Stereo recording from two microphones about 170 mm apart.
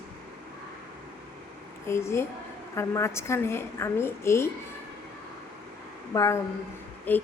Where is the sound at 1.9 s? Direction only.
15° left (ahead or behind).